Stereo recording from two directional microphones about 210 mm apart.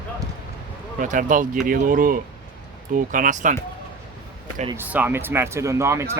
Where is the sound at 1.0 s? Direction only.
40° right (ahead or behind).